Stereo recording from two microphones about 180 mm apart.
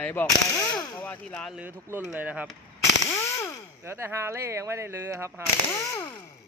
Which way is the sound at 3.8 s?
15° right (ahead or behind).